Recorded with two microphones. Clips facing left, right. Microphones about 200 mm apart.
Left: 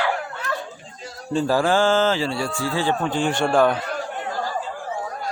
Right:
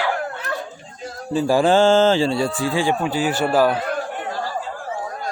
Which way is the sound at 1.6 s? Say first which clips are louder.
Right 7 dB; 25° right (ahead or behind).